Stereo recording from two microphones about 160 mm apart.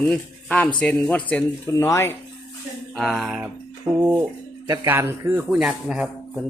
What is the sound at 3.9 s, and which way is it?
A man's voice, 15° right (ahead or behind).